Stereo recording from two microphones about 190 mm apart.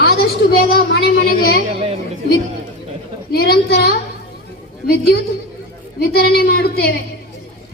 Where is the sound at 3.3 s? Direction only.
55° left (ahead or behind).